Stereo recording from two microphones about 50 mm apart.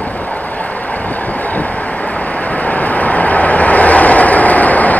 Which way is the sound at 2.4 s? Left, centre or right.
Left.